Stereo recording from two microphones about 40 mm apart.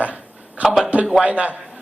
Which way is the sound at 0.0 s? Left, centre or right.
Right.